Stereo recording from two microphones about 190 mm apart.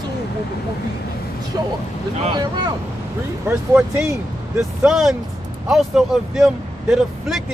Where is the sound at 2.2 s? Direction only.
25° right (ahead or behind).